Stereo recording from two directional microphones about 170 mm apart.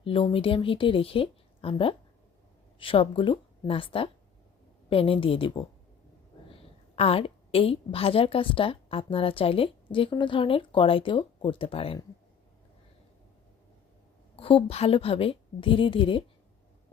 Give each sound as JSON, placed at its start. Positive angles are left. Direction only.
{"t": 0.0, "sound": "a woman's voice", "side_deg": 35}
{"t": 6.9, "sound": "a woman's voice", "side_deg": 35}
{"t": 14.3, "sound": "a woman's voice", "side_deg": 35}